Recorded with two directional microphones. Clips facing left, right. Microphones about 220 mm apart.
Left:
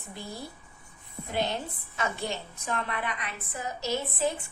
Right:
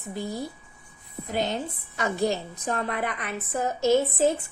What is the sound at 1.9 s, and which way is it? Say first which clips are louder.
A woman's voice: right 7 dB; 40° right (ahead or behind).